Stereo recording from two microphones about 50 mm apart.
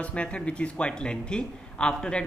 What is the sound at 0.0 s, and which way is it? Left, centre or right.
Speech, left.